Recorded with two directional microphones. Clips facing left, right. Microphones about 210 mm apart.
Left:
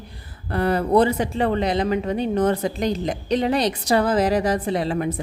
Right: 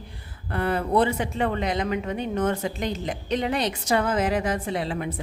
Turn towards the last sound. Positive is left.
turn(degrees=40)  # may be behind; listen again after turning